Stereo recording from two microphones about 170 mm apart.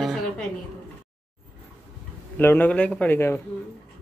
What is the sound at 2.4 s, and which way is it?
A man's voice, 10° left (ahead or behind).